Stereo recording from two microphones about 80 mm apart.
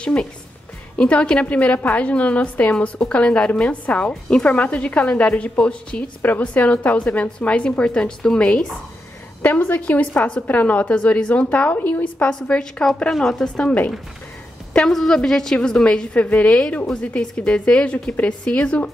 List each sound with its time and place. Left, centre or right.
0.0 s a woman's voice: centre
9.4 s a woman's voice: left